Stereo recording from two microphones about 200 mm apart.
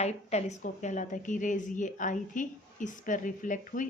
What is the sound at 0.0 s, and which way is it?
A woman's voice, 35° left (ahead or behind).